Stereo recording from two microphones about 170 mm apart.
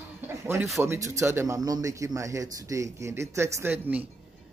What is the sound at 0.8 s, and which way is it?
A man's voice, 15° right (ahead or behind).